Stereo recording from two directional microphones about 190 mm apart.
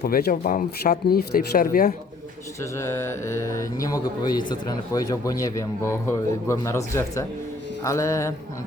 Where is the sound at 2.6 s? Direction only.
15° left (ahead or behind).